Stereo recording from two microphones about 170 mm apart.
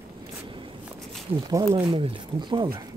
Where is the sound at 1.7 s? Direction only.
30° right (ahead or behind).